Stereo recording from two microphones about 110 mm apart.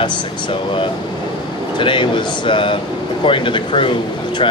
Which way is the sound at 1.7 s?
45° left (ahead or behind).